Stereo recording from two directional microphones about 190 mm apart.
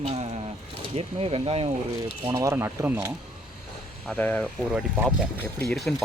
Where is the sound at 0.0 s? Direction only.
35° right (ahead or behind).